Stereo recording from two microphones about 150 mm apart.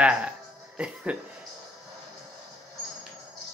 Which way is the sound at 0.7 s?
5° right (ahead or behind).